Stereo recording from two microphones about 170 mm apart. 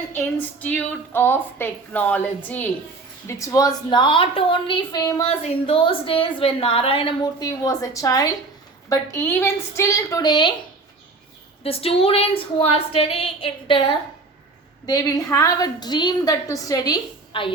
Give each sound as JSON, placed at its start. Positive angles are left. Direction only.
{"t": 0.1, "sound": "a woman's voice", "side_deg": 10}
{"t": 5.3, "sound": "a woman's voice", "side_deg": 35}
{"t": 11.6, "sound": "a woman's voice", "side_deg": 35}